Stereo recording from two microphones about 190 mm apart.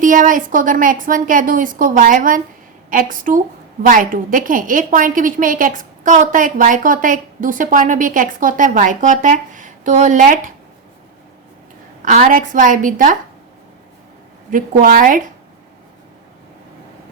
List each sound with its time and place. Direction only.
0.0 s a woman's voice: 45° right (ahead or behind)
12.0 s a woman's voice: 45° right (ahead or behind)
14.5 s a woman's voice: 45° right (ahead or behind)